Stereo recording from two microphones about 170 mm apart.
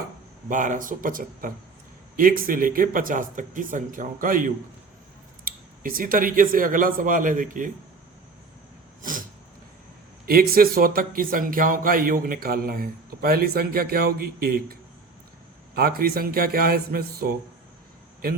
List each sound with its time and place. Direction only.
0.4 s speech: 50° right (ahead or behind)
9.0 s a sound: 55° right (ahead or behind)
10.5 s a man's voice: 60° right (ahead or behind)